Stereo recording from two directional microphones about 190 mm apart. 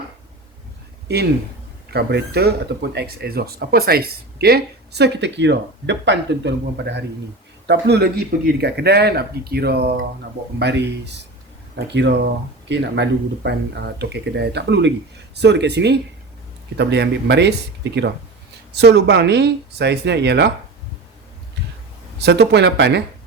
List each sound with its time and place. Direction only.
1.0 s speech: 60° right (ahead or behind)
18.7 s speech: 60° right (ahead or behind)
22.2 s speech: 65° right (ahead or behind)